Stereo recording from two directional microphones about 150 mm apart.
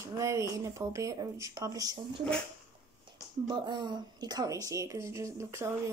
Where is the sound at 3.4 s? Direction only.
30° right (ahead or behind).